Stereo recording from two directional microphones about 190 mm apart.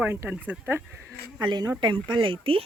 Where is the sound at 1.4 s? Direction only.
25° right (ahead or behind).